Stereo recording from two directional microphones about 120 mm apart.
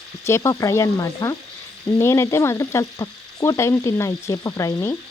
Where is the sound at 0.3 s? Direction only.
25° left (ahead or behind).